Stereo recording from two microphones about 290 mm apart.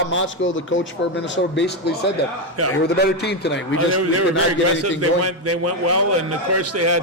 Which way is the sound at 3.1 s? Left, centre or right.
Left.